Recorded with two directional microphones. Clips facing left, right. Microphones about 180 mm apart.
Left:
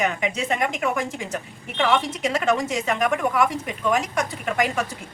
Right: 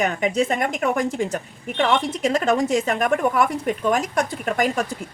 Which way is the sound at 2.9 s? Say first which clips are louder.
Right 2 dB; 40° right (ahead or behind).